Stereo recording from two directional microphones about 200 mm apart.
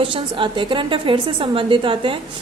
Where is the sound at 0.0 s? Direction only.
25° right (ahead or behind).